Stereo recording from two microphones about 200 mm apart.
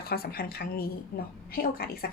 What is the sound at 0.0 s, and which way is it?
Speech, 50° left (ahead or behind).